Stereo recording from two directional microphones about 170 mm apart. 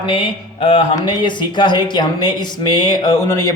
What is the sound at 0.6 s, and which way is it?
A man's voice, 35° left (ahead or behind).